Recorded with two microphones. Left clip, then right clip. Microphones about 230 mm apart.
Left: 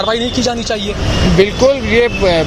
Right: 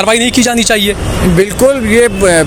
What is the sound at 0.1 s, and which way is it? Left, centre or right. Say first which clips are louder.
Speech: right 5 dB; right.